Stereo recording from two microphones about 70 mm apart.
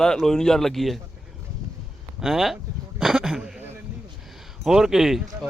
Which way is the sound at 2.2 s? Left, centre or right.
Centre.